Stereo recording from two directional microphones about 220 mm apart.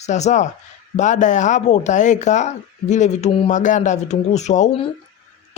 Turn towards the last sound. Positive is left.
turn(degrees=30)  # may be behind; listen again after turning